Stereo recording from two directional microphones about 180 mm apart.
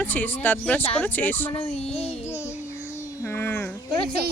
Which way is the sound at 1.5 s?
35° left (ahead or behind).